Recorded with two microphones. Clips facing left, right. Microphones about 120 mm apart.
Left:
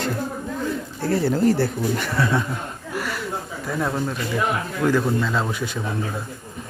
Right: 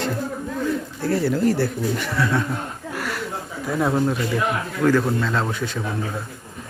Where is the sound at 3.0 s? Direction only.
Centre (ahead or behind).